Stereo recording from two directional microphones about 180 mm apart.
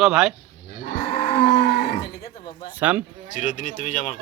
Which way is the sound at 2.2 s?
25° left (ahead or behind).